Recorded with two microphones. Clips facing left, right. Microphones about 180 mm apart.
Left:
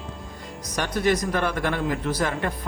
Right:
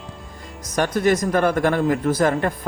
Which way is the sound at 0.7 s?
50° right (ahead or behind).